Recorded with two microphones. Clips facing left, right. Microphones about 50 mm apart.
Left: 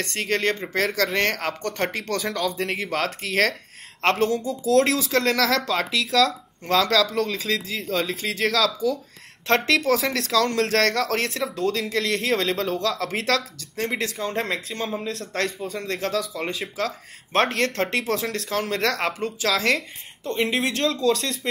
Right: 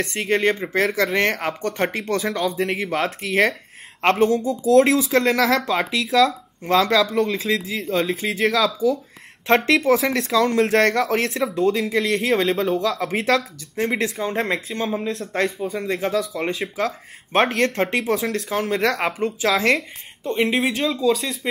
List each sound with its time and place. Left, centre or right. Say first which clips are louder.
0.0 s speech: right 4 dB; centre
4.0 s a woman's voice: right 3 dB; centre
4.3 s speech: right 4 dB; centre
8.7 s speech: right 4 dB; centre
9.7 s speech: right 3 dB; centre
16.7 s speech: right 3 dB; centre